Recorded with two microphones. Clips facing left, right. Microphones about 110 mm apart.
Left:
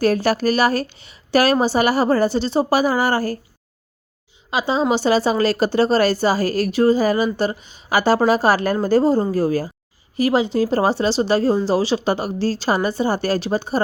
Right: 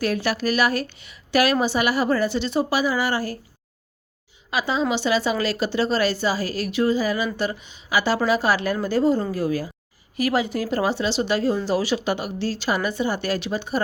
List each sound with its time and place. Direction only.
0.0 s speech: 40° left (ahead or behind)
4.5 s speech: 25° left (ahead or behind)
10.2 s speech: 25° left (ahead or behind)